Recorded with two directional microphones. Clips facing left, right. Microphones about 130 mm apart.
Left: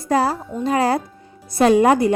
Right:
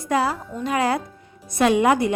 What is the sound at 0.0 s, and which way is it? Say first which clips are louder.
Speech: left 3 dB; 35° left (ahead or behind).